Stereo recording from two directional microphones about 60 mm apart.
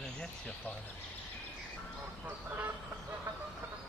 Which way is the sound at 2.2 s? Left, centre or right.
Right.